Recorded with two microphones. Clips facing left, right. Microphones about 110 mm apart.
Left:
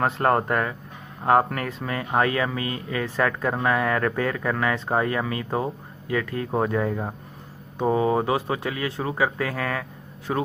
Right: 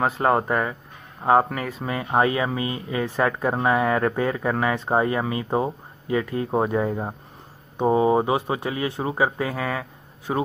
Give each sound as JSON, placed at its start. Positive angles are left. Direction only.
{"t": 0.0, "sound": "speech", "side_deg": -5}
{"t": 1.9, "sound": "speech", "side_deg": -20}